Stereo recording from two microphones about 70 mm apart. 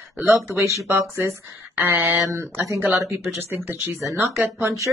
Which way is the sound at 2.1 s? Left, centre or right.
Right.